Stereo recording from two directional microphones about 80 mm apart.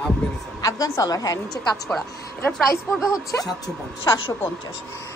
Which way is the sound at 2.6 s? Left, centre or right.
Left.